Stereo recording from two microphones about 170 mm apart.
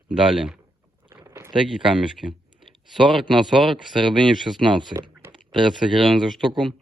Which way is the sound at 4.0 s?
25° right (ahead or behind).